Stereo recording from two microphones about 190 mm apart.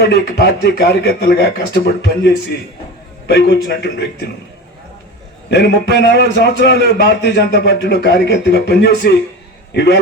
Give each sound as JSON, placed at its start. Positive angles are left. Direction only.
{"t": 0.1, "sound": "a man's voice", "side_deg": 60}
{"t": 5.5, "sound": "a man's voice", "side_deg": 60}